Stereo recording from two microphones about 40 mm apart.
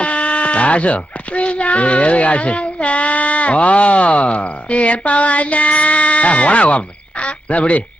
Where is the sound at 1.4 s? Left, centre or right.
Left.